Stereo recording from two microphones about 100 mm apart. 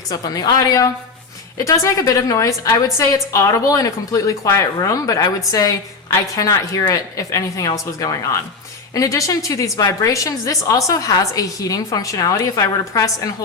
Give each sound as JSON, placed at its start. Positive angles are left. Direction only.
{"t": 0.1, "sound": "a woman's voice", "side_deg": 35}
{"t": 9.0, "sound": "a woman's voice", "side_deg": 35}